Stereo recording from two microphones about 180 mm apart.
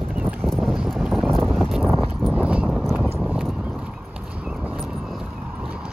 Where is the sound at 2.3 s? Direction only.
5° right (ahead or behind).